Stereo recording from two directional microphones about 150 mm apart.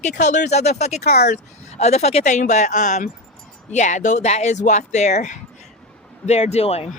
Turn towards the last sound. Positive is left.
turn(degrees=45)  # may be behind; listen again after turning